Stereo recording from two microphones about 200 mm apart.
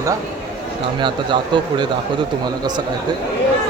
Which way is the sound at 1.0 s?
25° right (ahead or behind).